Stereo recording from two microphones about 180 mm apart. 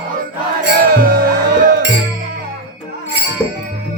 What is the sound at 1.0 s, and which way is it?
Music, 55° right (ahead or behind).